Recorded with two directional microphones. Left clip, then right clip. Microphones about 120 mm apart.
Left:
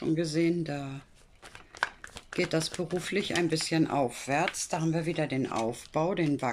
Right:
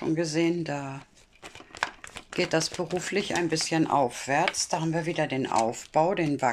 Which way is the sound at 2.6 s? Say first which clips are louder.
Right 3 dB; centre (ahead or behind).